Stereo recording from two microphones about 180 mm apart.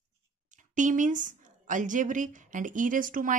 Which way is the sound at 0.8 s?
45° right (ahead or behind).